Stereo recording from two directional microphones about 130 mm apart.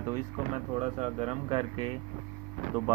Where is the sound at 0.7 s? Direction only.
55° right (ahead or behind).